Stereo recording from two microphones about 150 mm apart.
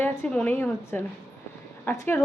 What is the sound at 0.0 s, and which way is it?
A woman's voice, 10° left (ahead or behind).